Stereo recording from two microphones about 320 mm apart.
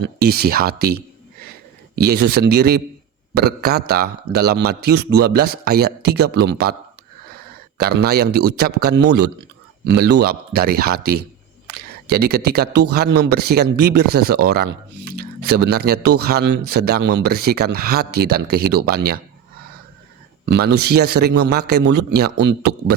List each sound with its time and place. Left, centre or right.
0.0 s a man's voice: right
7.8 s a man's voice: right
20.4 s a man's voice: right